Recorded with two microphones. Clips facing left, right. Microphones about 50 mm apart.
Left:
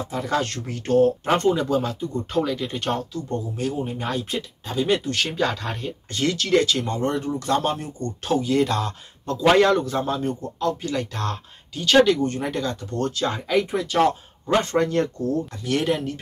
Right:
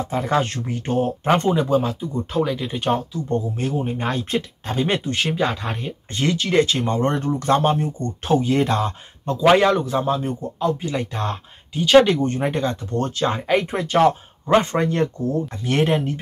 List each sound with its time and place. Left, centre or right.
0.1 s speech: right
3.3 s speech: right
5.1 s speech: centre
12.1 s speech: right